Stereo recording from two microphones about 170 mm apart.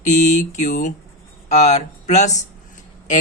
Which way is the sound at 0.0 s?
45° left (ahead or behind).